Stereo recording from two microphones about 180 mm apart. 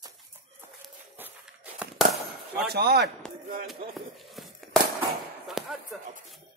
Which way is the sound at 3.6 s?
Centre (ahead or behind).